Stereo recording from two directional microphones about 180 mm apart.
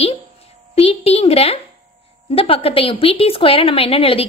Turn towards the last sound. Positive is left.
turn(degrees=30)  # may be behind; listen again after turning